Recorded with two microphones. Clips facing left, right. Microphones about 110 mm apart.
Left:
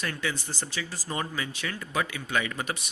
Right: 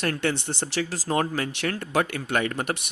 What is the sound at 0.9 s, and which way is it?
Speech, 85° right.